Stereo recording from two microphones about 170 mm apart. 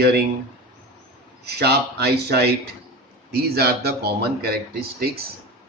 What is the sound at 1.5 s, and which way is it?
Speech, 70° right (ahead or behind).